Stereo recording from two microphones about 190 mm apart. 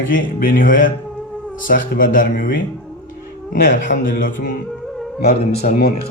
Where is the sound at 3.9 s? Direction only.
45° left (ahead or behind).